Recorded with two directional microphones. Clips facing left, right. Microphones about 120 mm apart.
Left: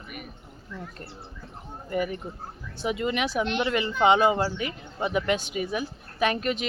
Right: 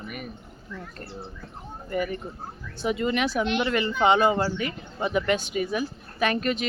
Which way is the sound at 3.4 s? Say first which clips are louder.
Left 1 dB; centre (ahead or behind).